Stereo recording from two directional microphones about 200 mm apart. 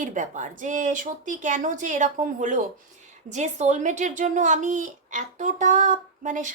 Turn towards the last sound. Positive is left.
turn(degrees=-40)  # may be behind; listen again after turning